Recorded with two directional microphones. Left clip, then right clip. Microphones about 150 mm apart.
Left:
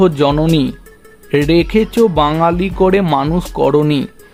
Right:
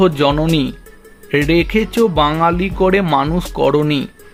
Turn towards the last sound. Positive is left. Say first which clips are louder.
# left 2 dB
turn(degrees=20)  # may be behind; listen again after turning